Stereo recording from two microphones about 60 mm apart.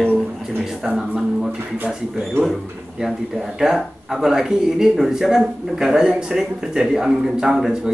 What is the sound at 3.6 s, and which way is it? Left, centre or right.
Speech, centre.